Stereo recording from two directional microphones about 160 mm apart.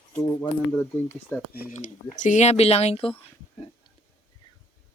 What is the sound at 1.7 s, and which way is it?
Speech, 50° left (ahead or behind).